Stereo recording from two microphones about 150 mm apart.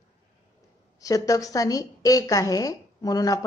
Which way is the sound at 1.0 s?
25° left (ahead or behind).